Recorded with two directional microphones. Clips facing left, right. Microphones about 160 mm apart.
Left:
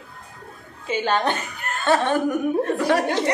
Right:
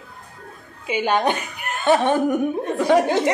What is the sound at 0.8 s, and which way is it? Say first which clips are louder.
Speech: right 2 dB; 15° right (ahead or behind).